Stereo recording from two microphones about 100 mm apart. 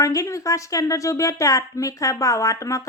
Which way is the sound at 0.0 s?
30° left (ahead or behind).